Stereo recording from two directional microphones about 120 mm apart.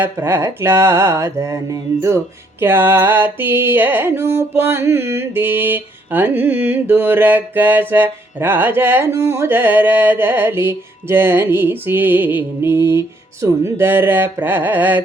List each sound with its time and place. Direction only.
0.0 s mantra: 20° right (ahead or behind)